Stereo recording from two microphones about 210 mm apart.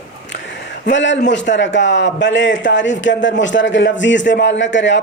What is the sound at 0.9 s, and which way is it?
A man's voice, 60° left (ahead or behind).